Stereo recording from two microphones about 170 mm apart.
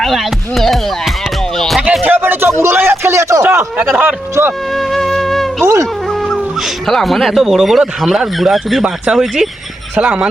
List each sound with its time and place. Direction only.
0.0 s a sound: centre (ahead or behind)
3.8 s speech: 5° right (ahead or behind)
4.4 s speech: 15° right (ahead or behind)
4.7 s music: centre (ahead or behind)
5.6 s music: 20° right (ahead or behind)
6.8 s speech: centre (ahead or behind)